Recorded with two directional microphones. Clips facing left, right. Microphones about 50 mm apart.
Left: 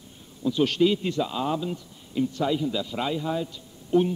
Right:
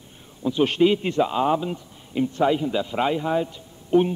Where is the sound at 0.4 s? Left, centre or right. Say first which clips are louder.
Right 3 dB; right.